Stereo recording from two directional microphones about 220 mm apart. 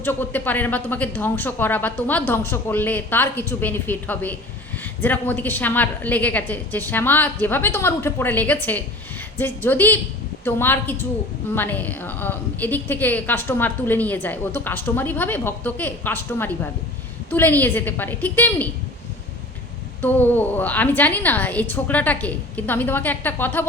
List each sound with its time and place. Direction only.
0.0 s a woman's voice: 10° left (ahead or behind)
20.0 s a woman's voice: 10° left (ahead or behind)